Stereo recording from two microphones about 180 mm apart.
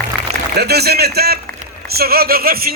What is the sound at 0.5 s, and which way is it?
A man's voice, 65° right (ahead or behind).